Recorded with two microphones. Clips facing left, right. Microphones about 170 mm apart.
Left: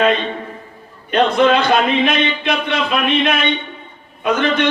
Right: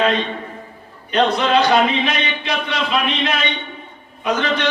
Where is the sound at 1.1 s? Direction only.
55° left (ahead or behind).